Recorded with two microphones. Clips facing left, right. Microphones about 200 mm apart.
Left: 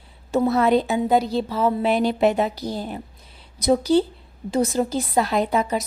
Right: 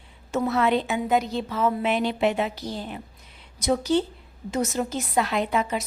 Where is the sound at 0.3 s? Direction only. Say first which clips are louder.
Left 4 dB; 35° left (ahead or behind).